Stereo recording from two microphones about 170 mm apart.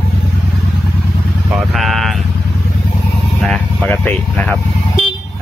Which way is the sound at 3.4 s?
5° left (ahead or behind).